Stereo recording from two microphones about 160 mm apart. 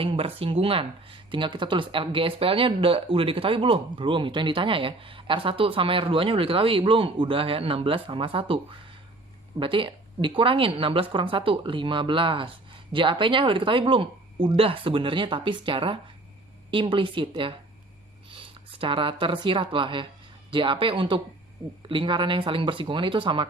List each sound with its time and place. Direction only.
0.0 s speech: 35° right (ahead or behind)